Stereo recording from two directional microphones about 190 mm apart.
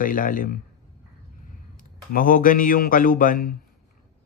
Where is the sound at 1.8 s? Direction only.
45° left (ahead or behind).